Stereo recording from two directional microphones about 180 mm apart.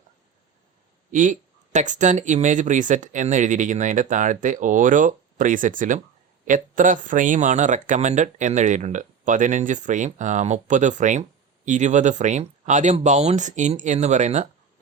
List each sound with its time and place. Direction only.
1.1 s speech: 45° right (ahead or behind)